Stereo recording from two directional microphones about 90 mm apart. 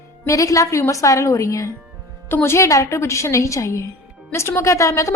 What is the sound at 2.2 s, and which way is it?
A woman's voice, 25° left (ahead or behind).